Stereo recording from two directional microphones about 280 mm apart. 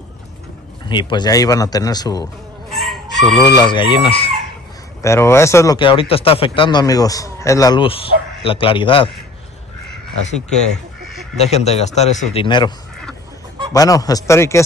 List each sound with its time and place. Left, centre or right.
0.8 s speech: centre
2.7 s chicken: centre
3.4 s speech: centre
11.3 s a man's voice: left
13.7 s speech: centre